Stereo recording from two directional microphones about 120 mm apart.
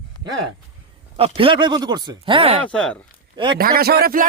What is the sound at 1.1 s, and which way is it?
Speech, 55° right (ahead or behind).